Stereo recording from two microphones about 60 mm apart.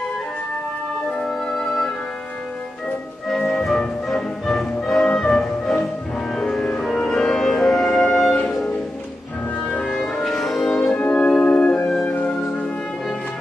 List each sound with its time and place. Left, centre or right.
1.2 s music: centre
3.3 s music: centre
9.8 s music: centre
10.9 s music: left